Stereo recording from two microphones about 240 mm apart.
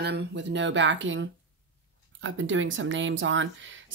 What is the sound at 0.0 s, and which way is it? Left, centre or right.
Speech, right.